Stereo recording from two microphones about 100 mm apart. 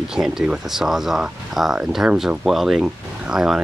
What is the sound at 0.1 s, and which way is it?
Speech, 5° right (ahead or behind).